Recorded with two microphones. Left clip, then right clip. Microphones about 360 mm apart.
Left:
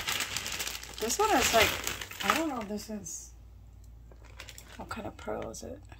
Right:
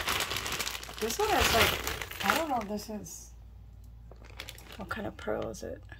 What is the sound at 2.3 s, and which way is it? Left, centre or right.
Speech, centre.